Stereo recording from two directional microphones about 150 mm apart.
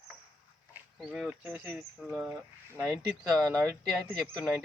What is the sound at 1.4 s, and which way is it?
Speech, 15° right (ahead or behind).